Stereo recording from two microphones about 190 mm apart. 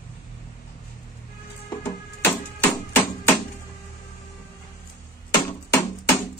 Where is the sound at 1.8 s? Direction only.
10° left (ahead or behind).